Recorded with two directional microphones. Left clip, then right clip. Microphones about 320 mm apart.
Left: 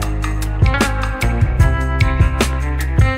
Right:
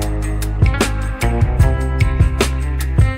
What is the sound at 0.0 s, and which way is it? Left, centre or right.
Music, centre.